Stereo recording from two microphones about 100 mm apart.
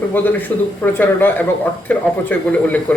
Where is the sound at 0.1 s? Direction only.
20° left (ahead or behind).